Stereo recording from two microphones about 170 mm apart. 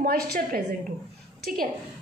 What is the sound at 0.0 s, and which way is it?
Speech, 65° right (ahead or behind).